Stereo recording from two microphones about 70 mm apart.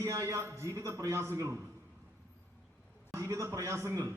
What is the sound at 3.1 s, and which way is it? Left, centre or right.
A man's voice, right.